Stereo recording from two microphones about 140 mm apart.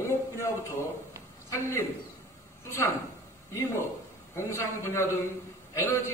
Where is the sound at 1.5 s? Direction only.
20° left (ahead or behind).